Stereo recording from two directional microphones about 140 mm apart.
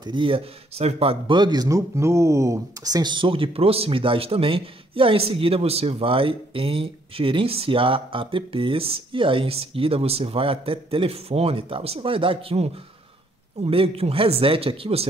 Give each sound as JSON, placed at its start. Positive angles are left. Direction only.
{"t": 0.0, "sound": "a man's voice", "side_deg": -35}